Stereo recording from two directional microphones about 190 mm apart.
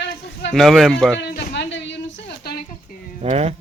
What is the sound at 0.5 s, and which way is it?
Speech, centre (ahead or behind).